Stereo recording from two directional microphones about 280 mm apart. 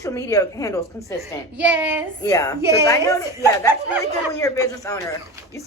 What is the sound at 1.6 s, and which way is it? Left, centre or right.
Speech, centre.